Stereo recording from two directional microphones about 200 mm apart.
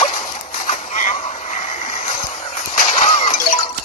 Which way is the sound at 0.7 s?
40° left (ahead or behind).